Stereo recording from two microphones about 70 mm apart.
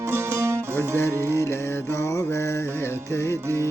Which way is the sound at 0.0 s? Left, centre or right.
Right.